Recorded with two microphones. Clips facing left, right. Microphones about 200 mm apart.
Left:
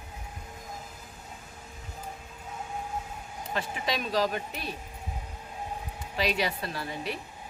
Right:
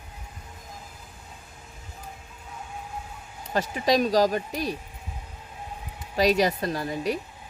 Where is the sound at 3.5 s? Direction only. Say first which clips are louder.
Right 9 dB; 40° right (ahead or behind).